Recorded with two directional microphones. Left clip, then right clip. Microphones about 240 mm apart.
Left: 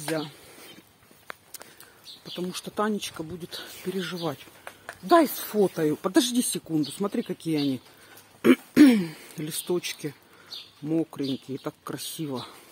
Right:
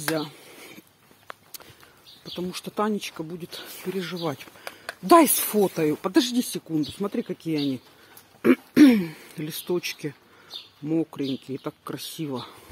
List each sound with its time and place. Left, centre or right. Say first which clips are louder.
0.1 s a sound: right 2 dB; centre
2.2 s speech: right 1 dB; centre
5.0 s speech: right 4 dB; right
5.6 s speech: right 1 dB; centre
8.4 s throat clearing: even; centre
8.8 s speech: right 2 dB; centre